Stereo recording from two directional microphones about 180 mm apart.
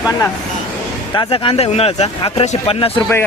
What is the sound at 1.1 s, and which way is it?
Speech, 30° left (ahead or behind).